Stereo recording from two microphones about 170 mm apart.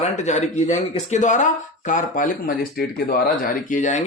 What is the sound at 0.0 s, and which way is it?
Speech, 45° left (ahead or behind).